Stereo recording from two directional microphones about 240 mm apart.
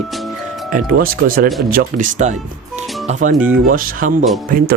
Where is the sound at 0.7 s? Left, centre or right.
Right.